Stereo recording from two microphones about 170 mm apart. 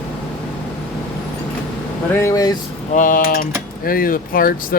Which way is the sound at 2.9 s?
50° left (ahead or behind).